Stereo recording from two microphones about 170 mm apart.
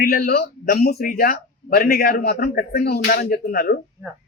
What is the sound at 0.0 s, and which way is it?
A man's voice, 65° left (ahead or behind).